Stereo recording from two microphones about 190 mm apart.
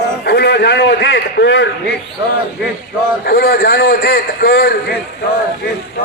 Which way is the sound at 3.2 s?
55° left (ahead or behind).